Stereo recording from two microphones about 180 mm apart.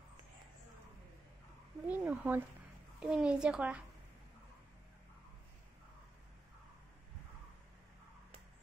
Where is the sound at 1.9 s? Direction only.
10° right (ahead or behind).